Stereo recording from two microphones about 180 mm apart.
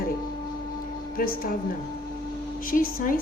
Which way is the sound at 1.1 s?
55° left (ahead or behind).